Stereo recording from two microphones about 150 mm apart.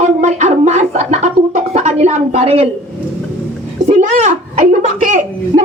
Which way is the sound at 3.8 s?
50° right (ahead or behind).